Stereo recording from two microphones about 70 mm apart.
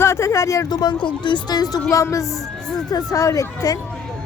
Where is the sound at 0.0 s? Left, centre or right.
Left.